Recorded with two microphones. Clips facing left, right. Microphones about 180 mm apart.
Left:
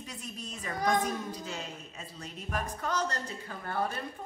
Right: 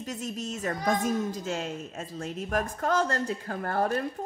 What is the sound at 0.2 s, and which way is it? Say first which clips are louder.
Speech: right 9 dB; 85° right.